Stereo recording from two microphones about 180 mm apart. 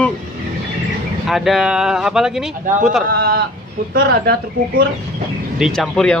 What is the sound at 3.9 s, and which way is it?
Speech, 55° right (ahead or behind).